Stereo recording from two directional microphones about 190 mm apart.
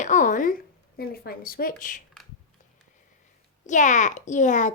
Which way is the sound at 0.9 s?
55° left (ahead or behind).